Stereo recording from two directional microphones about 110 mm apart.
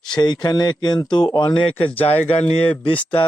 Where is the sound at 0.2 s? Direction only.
40° left (ahead or behind).